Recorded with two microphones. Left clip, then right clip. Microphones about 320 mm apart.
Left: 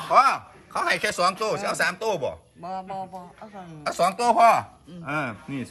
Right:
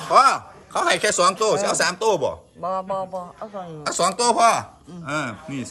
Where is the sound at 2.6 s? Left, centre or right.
Right.